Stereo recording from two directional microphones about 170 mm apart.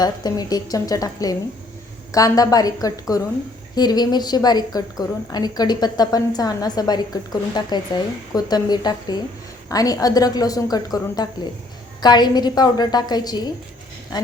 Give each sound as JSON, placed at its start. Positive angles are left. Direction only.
{"t": 0.0, "sound": "a woman's voice", "side_deg": 25}